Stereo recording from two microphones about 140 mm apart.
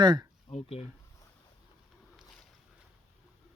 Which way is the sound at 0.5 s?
50° left (ahead or behind).